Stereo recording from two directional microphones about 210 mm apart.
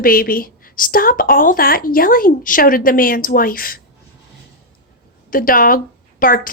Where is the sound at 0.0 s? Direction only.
45° left (ahead or behind).